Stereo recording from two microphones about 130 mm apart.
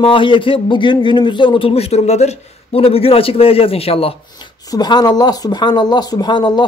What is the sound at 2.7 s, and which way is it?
A man's voice, 50° left (ahead or behind).